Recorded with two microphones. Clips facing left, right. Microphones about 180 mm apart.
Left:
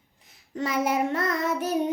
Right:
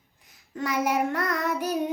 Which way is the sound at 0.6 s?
25° left (ahead or behind).